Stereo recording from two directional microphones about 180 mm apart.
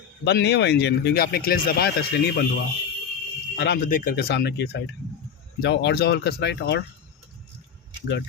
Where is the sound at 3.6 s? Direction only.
65° left (ahead or behind).